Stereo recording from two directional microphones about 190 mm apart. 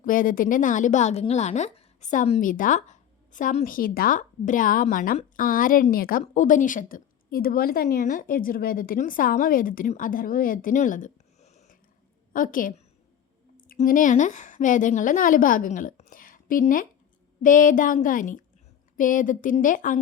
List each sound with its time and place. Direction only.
0.0 s a woman's voice: 45° left (ahead or behind)
12.3 s a woman's voice: 45° left (ahead or behind)